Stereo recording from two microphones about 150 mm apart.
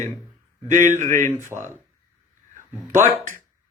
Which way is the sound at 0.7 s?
55° right (ahead or behind).